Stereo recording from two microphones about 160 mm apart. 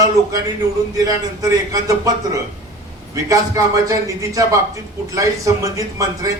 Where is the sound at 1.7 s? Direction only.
20° right (ahead or behind).